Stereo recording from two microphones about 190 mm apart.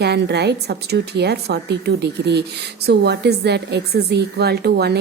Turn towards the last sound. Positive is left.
turn(degrees=-60)  # may be behind; listen again after turning